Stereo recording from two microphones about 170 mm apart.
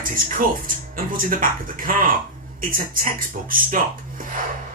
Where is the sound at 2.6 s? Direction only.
55° right (ahead or behind).